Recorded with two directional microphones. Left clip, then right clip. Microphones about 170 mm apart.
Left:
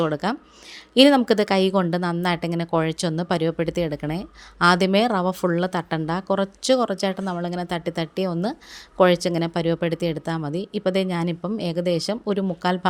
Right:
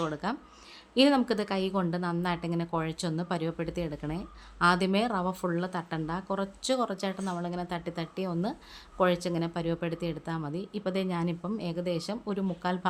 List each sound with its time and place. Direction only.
0.0 s a woman's voice: 35° left (ahead or behind)